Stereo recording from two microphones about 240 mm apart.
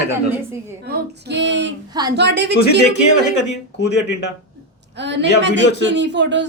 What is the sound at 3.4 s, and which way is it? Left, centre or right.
Speech, left.